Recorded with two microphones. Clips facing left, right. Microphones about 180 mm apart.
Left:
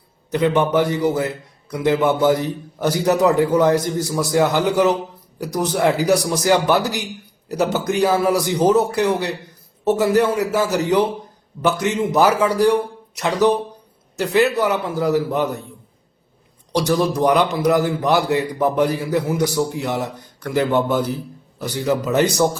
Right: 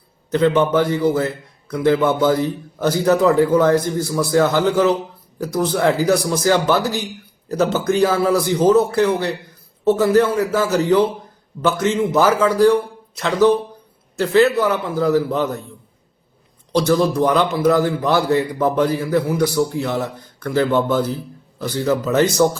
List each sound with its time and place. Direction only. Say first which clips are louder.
0.3 s a man's voice: right 2 dB; 15° left (ahead or behind)
16.7 s a man's voice: right 2 dB; 15° left (ahead or behind)